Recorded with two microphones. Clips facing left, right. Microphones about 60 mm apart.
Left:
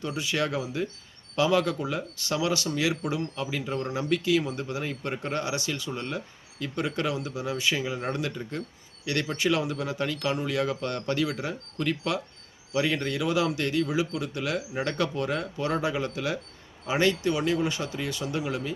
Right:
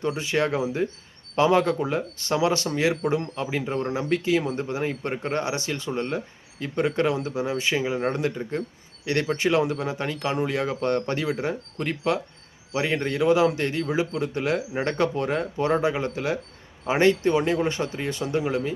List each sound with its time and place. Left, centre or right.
0.1 s speech: right